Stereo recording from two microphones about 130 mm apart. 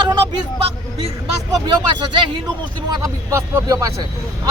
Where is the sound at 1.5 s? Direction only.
35° right (ahead or behind).